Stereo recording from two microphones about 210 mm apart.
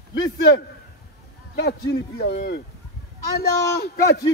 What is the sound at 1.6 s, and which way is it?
Speech, 55° left (ahead or behind).